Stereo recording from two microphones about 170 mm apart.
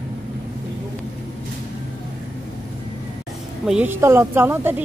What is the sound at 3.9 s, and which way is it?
Speech, 15° right (ahead or behind).